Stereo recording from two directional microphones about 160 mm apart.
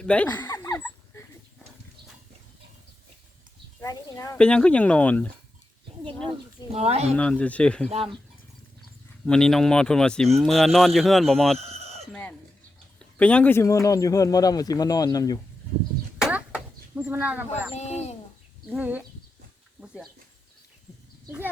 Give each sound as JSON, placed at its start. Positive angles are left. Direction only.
{"t": 0.0, "sound": "speech", "side_deg": 10}
{"t": 0.3, "sound": "a sound", "side_deg": 20}
{"t": 3.8, "sound": "a sound", "side_deg": 20}
{"t": 4.4, "sound": "speech", "side_deg": 5}
{"t": 6.7, "sound": "speech", "side_deg": -40}
{"t": 7.2, "sound": "speech", "side_deg": 10}
{"t": 7.9, "sound": "speech", "side_deg": -40}
{"t": 9.2, "sound": "speech", "side_deg": 5}
{"t": 11.7, "sound": "chicken", "side_deg": -40}
{"t": 13.0, "sound": "speech", "side_deg": 5}
{"t": 16.9, "sound": "speech", "side_deg": -10}
{"t": 17.7, "sound": "speech", "side_deg": 45}
{"t": 18.7, "sound": "speech", "side_deg": -10}
{"t": 21.2, "sound": "speech", "side_deg": -10}